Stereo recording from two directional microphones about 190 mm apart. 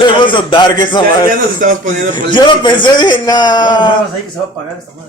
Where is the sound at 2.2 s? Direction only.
25° left (ahead or behind).